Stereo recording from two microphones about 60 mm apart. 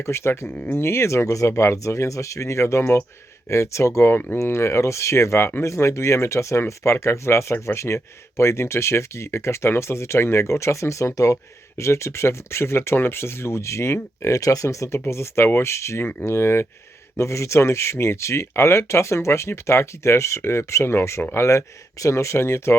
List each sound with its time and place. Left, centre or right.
0.0 s speech: left
14.3 s speech: left
14.9 s speech: left